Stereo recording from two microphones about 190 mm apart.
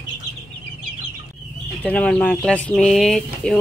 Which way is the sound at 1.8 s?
5° left (ahead or behind).